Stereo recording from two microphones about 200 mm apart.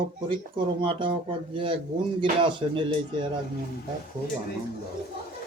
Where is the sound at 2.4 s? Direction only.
25° right (ahead or behind).